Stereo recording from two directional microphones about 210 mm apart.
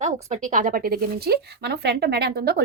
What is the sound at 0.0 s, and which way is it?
A woman's voice, 35° right (ahead or behind).